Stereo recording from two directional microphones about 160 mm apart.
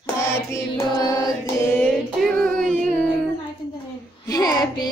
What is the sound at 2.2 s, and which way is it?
Child singing, centre (ahead or behind).